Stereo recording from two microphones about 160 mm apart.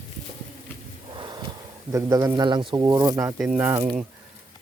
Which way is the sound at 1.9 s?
20° right (ahead or behind).